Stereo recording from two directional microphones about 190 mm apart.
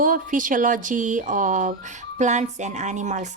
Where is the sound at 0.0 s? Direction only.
45° right (ahead or behind).